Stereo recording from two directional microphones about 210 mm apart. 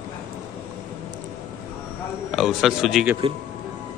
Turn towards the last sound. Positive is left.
turn(degrees=0)  # may be behind; listen again after turning